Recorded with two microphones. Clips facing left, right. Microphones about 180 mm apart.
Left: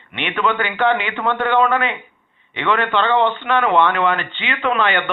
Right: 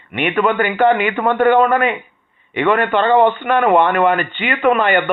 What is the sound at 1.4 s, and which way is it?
A man's voice, 45° right (ahead or behind).